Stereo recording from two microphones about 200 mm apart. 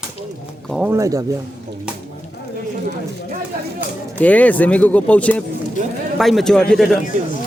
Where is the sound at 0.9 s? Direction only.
15° right (ahead or behind).